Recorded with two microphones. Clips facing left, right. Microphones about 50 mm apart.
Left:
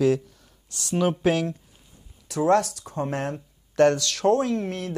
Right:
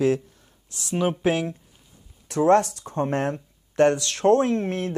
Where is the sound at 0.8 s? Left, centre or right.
Right.